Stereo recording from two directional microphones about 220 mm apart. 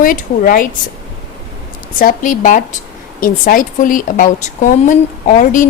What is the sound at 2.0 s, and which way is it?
A woman's voice, 40° left (ahead or behind).